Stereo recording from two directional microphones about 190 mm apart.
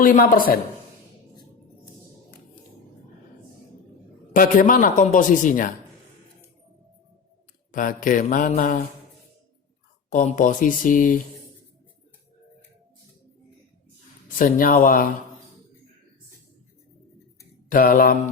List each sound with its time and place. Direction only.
0.0 s a man's voice: 45° left (ahead or behind)
4.4 s a man's voice: 45° left (ahead or behind)
7.7 s a man's voice: 45° left (ahead or behind)
10.1 s a man's voice: 45° left (ahead or behind)
14.3 s a man's voice: 45° left (ahead or behind)
17.7 s a man's voice: 50° left (ahead or behind)